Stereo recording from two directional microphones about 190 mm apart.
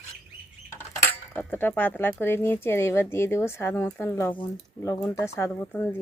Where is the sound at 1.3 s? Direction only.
10° left (ahead or behind).